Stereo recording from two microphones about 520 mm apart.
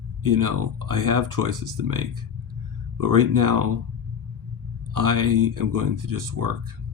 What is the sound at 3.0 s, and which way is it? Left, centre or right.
Speech, right.